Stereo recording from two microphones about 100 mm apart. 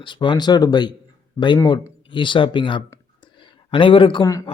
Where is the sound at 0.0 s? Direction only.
50° left (ahead or behind).